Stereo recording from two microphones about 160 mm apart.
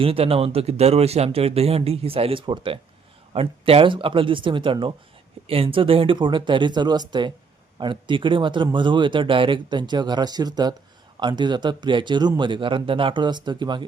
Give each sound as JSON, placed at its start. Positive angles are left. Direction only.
{"t": 0.0, "sound": "a man's voice", "side_deg": -35}